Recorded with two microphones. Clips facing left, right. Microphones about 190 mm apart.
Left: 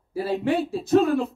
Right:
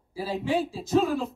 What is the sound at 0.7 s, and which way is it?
Speech, 60° left (ahead or behind).